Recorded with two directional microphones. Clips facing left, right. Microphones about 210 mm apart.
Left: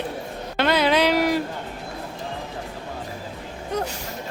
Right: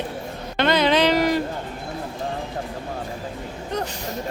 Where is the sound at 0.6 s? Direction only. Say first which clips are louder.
Right 1 dB; 5° left (ahead or behind).